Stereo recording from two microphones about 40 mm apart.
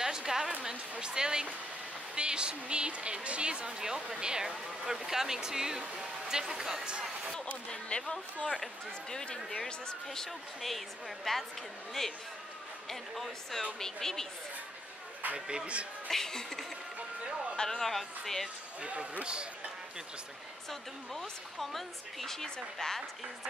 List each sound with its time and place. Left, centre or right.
0.0 s a woman's voice: centre
7.7 s a woman's voice: left
15.3 s speech: right
16.1 s a woman's voice: centre
18.8 s speech: right
21.1 s a woman's voice: centre